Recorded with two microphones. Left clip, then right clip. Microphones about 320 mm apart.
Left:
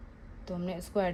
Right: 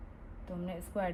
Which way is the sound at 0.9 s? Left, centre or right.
Left.